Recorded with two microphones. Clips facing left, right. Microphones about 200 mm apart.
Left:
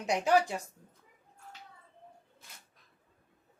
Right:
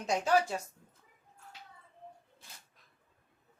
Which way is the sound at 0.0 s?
15° left (ahead or behind).